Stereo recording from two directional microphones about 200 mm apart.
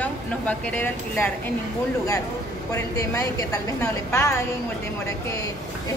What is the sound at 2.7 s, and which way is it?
A woman's voice, 15° left (ahead or behind).